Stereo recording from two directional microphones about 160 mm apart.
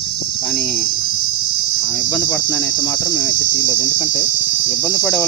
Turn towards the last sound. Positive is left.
turn(degrees=5)  # may be behind; listen again after turning